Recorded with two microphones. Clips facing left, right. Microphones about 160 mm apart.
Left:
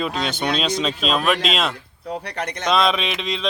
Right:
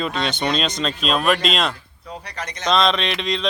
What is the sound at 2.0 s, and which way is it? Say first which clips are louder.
Speech: left 5 dB; 65° left (ahead or behind).